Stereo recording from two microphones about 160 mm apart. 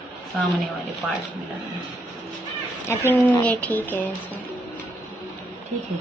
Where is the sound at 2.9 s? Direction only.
15° left (ahead or behind).